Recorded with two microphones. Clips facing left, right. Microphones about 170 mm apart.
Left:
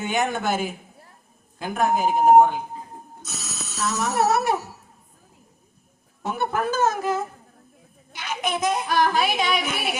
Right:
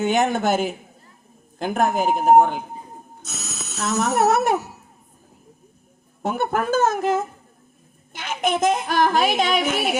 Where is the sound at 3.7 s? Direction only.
55° right (ahead or behind).